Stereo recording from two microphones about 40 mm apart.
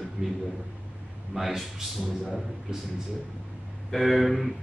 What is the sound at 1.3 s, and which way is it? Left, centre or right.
Speech, centre.